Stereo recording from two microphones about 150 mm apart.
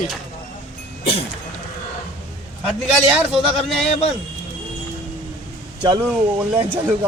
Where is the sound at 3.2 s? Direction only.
Centre (ahead or behind).